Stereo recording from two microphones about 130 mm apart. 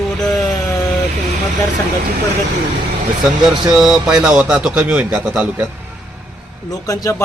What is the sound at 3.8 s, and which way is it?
A man's voice, 5° right (ahead or behind).